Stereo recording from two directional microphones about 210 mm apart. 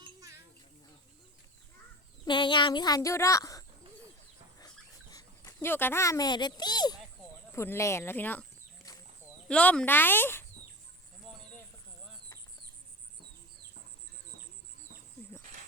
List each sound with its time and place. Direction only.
2.2 s speech: 20° left (ahead or behind)
5.1 s a child's voice: 15° left (ahead or behind)